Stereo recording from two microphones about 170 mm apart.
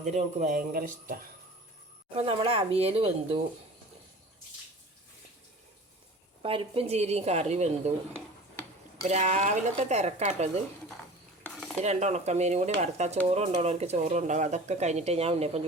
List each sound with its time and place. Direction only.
0.0 s speech: 45° right (ahead or behind)
2.1 s speech: 35° right (ahead or behind)
6.4 s speech: 30° right (ahead or behind)
9.0 s speech: 45° right (ahead or behind)
11.8 s speech: 40° right (ahead or behind)